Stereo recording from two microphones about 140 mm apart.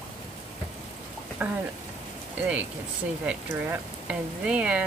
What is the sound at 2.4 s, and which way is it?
Speech, 10° right (ahead or behind).